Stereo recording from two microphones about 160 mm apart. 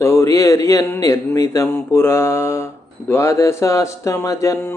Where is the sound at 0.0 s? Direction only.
20° left (ahead or behind).